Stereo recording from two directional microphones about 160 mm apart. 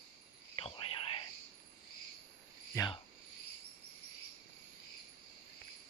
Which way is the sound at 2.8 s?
20° left (ahead or behind).